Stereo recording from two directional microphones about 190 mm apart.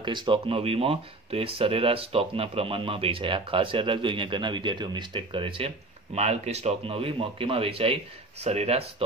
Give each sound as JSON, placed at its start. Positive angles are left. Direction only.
{"t": 0.0, "sound": "a man's voice", "side_deg": -25}